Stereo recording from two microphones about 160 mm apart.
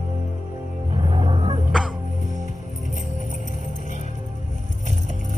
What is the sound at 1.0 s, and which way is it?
Music, 35° right (ahead or behind).